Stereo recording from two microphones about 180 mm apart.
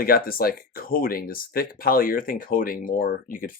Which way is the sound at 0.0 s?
55° left (ahead or behind).